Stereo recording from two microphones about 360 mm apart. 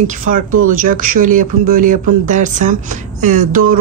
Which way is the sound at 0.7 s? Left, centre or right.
Right.